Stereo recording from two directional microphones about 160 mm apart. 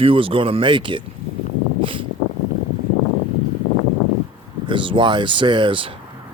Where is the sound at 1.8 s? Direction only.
30° right (ahead or behind).